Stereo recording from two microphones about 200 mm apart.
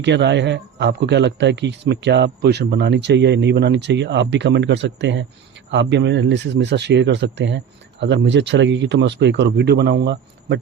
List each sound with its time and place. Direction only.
0.0 s a man's voice: 60° right (ahead or behind)